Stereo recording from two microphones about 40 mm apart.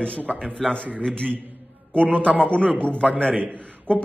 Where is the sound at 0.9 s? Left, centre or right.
Left.